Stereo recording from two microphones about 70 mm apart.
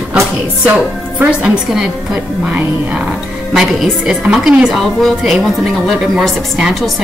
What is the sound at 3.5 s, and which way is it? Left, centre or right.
A woman's voice, centre.